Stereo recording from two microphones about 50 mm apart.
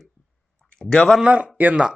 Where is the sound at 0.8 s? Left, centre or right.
Centre.